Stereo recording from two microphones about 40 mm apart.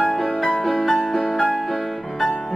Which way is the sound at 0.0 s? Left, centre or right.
Centre.